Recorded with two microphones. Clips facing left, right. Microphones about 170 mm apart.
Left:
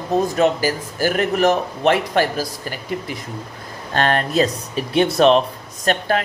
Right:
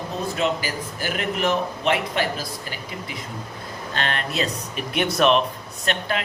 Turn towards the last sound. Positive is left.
turn(degrees=40)  # may be behind; listen again after turning